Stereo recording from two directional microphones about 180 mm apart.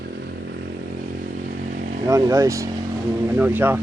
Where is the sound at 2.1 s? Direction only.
20° right (ahead or behind).